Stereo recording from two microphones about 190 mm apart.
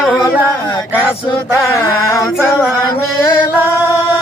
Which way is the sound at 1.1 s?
25° left (ahead or behind).